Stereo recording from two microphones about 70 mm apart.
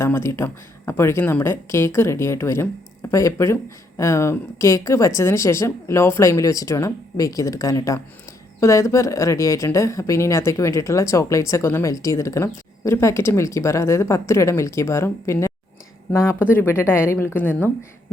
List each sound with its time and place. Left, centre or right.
0.0 s speech: left